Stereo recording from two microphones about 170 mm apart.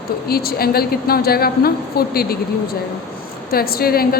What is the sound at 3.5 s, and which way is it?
Speech, 60° left (ahead or behind).